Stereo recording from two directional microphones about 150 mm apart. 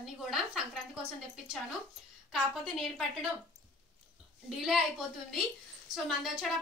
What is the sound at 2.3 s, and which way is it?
Speech, centre (ahead or behind).